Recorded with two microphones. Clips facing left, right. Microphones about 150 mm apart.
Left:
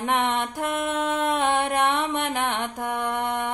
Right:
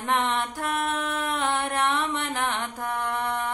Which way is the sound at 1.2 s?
15° left (ahead or behind).